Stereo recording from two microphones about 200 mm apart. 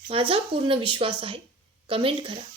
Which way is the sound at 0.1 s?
25° right (ahead or behind).